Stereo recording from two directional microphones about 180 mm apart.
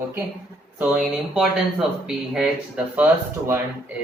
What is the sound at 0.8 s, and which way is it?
Speech, 5° right (ahead or behind).